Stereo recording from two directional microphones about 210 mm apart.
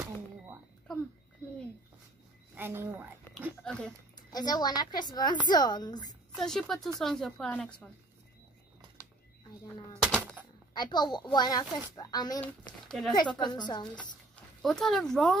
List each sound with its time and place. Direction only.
2.5 s speech: 10° right (ahead or behind)
3.6 s speech: 5° left (ahead or behind)
4.3 s a woman's voice: 20° left (ahead or behind)
6.3 s speech: centre (ahead or behind)
10.0 s a sound: 5° left (ahead or behind)
10.7 s a woman's voice: 20° left (ahead or behind)
12.4 s speech: 5° left (ahead or behind)
13.1 s a woman's voice: 20° left (ahead or behind)
14.3 s speech: centre (ahead or behind)